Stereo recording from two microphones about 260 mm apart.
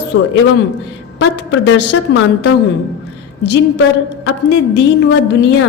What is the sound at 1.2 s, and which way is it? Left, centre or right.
A woman's voice, left.